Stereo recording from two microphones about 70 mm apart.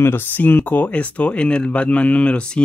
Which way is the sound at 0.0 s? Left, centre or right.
Left.